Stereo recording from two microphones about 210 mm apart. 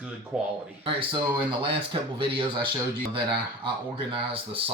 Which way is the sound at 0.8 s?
25° right (ahead or behind).